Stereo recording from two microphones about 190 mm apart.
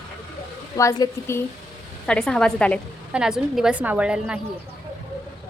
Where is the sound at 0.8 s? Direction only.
15° left (ahead or behind).